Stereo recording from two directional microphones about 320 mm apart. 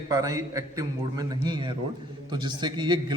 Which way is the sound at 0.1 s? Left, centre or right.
Centre.